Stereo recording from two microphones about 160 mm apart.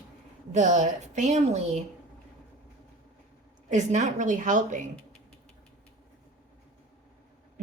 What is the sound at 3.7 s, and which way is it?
A woman's voice, 50° right (ahead or behind).